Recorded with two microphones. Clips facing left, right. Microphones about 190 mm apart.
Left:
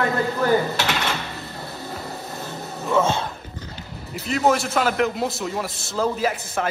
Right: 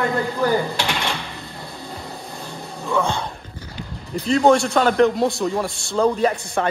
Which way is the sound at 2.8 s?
20° left (ahead or behind).